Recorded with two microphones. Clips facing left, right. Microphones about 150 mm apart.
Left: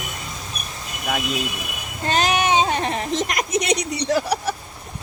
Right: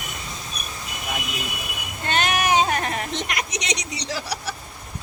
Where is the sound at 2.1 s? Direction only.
35° left (ahead or behind); by 4.6 s 55° left (ahead or behind).